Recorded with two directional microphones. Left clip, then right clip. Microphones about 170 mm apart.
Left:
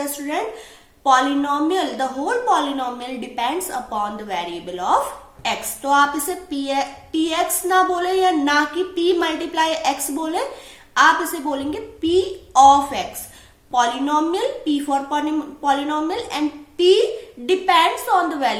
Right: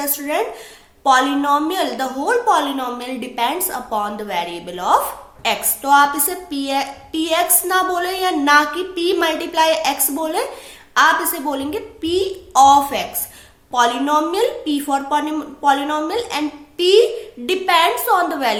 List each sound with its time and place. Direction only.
0.0 s a woman's voice: 35° right (ahead or behind)